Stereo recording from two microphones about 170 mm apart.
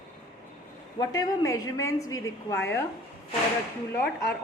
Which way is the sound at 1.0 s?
20° left (ahead or behind).